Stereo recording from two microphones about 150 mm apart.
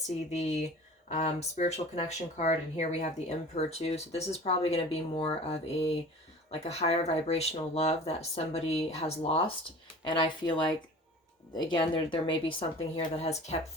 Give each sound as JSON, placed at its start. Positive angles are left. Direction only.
{"t": 0.3, "sound": "speech", "side_deg": 45}
{"t": 10.1, "sound": "speech", "side_deg": 30}